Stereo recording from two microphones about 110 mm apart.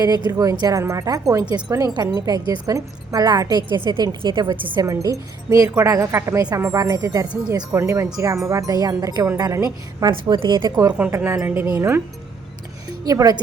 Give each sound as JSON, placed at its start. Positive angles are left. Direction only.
{"t": 0.3, "sound": "a woman's voice", "side_deg": -35}
{"t": 7.8, "sound": "a woman's voice", "side_deg": -25}
{"t": 10.1, "sound": "a woman's voice", "side_deg": -45}
{"t": 11.4, "sound": "a woman's voice", "side_deg": -15}
{"t": 13.1, "sound": "a woman's voice", "side_deg": -35}